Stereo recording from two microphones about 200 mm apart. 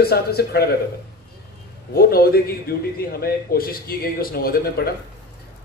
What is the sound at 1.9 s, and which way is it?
A man's voice, 50° left (ahead or behind).